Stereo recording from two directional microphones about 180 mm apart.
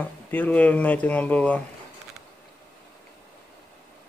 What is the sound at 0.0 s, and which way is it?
Speech, 10° left (ahead or behind).